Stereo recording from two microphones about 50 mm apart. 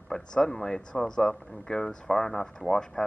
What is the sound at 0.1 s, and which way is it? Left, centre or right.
Speech, centre.